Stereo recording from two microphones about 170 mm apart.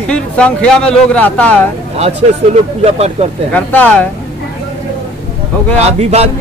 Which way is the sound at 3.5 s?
10° left (ahead or behind).